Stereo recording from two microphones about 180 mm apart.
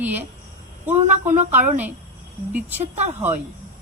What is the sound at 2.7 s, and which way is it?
Speech, 40° right (ahead or behind).